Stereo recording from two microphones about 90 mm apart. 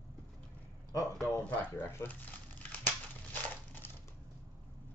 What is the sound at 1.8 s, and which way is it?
Speech, 30° left (ahead or behind).